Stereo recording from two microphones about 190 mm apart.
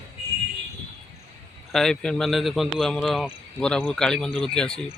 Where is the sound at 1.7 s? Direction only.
5° left (ahead or behind).